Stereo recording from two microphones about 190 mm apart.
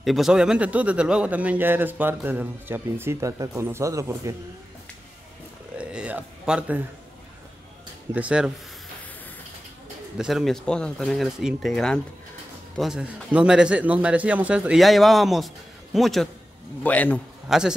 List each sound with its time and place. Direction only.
0.0 s speech: centre (ahead or behind); by 4.4 s 15° right (ahead or behind)
5.8 s a sound: 5° right (ahead or behind)
8.1 s speech: 5° right (ahead or behind)
10.1 s a man's voice: centre (ahead or behind)
17.5 s a man's voice: 5° right (ahead or behind)